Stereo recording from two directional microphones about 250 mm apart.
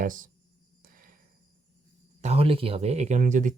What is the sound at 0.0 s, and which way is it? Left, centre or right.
Speech, right.